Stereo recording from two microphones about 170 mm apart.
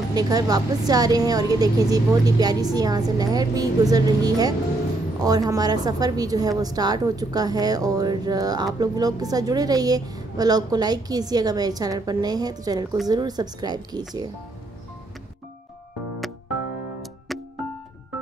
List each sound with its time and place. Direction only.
0.1 s speech: 20° right (ahead or behind)
17.3 s music: centre (ahead or behind)